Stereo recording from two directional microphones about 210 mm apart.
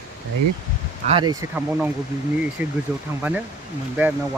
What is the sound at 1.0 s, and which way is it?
Speech, 25° right (ahead or behind).